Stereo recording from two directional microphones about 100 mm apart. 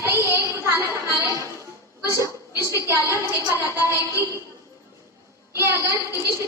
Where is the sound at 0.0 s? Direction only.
25° right (ahead or behind).